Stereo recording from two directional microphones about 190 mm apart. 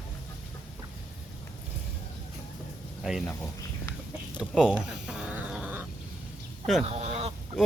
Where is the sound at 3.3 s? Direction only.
10° left (ahead or behind).